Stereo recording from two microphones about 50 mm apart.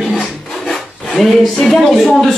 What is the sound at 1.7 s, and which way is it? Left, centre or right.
Speech, centre.